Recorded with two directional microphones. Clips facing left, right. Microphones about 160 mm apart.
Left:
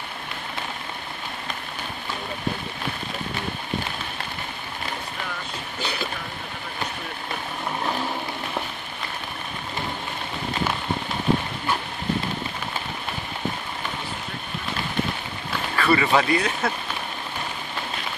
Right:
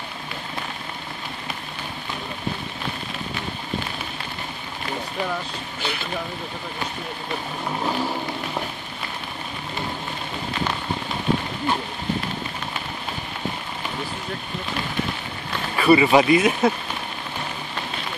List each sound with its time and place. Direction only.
15.7 s speech: 15° right (ahead or behind)